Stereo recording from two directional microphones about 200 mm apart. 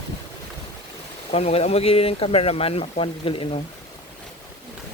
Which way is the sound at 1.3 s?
30° left (ahead or behind).